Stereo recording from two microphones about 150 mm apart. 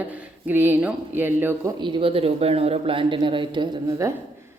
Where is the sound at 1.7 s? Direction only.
30° right (ahead or behind).